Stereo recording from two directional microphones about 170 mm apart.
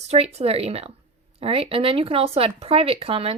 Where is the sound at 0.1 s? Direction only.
40° right (ahead or behind).